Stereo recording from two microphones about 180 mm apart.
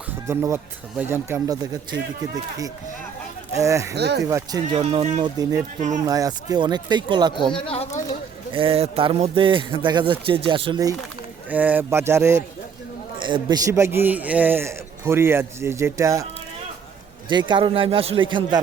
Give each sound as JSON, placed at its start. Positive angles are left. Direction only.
{"t": 0.3, "sound": "a man's voice", "side_deg": -15}
{"t": 3.9, "sound": "speech", "side_deg": -65}
{"t": 4.3, "sound": "a man's voice", "side_deg": -15}
{"t": 4.7, "sound": "speech", "side_deg": -35}
{"t": 5.4, "sound": "a man's voice", "side_deg": -20}
{"t": 7.5, "sound": "speech", "side_deg": 30}
{"t": 8.5, "sound": "a man's voice", "side_deg": -30}
{"t": 11.4, "sound": "a man's voice", "side_deg": -10}
{"t": 17.2, "sound": "a man's voice", "side_deg": -25}